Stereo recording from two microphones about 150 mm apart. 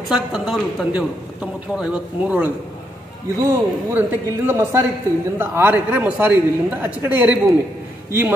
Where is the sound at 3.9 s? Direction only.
15° right (ahead or behind).